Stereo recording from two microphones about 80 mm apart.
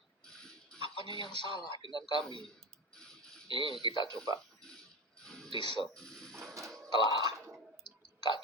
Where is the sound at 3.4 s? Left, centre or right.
Right.